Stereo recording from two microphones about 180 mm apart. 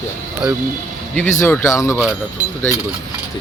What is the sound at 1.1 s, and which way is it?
Speech, 10° left (ahead or behind).